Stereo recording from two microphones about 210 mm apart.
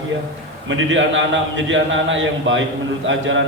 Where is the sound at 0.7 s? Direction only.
60° right (ahead or behind).